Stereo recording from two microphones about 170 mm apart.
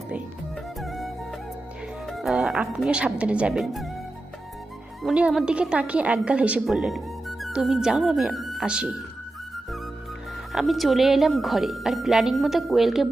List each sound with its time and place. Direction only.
0.8 s music: centre (ahead or behind)
2.0 s a woman's voice: centre (ahead or behind)
5.0 s a woman's voice: 5° right (ahead or behind)
10.5 s a woman's voice: centre (ahead or behind)